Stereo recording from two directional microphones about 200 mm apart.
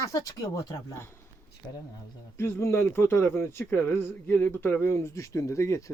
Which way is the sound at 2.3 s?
15° left (ahead or behind).